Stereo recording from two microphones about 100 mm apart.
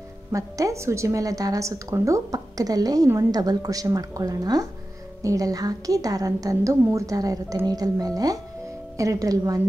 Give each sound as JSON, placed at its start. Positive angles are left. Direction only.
{"t": 0.3, "sound": "a woman's voice", "side_deg": -35}